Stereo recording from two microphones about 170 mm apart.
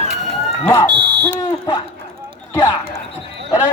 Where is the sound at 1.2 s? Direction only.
20° left (ahead or behind).